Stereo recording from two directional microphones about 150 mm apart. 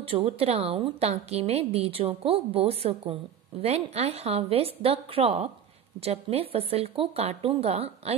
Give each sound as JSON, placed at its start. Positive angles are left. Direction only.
{"t": 0.0, "sound": "a woman's voice", "side_deg": -40}